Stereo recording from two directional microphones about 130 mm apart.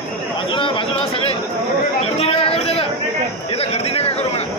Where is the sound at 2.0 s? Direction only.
45° left (ahead or behind).